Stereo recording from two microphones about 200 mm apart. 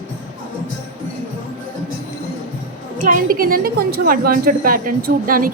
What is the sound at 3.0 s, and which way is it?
A woman's voice, 45° right (ahead or behind).